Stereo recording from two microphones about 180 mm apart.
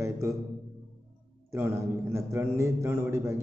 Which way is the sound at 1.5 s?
15° right (ahead or behind).